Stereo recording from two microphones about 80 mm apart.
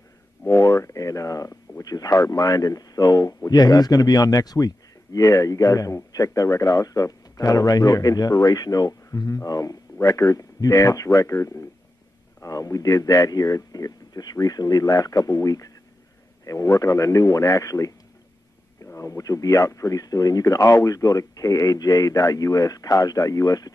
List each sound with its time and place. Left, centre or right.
0.5 s a sound: left
1.8 s speech: left
18.9 s speech: left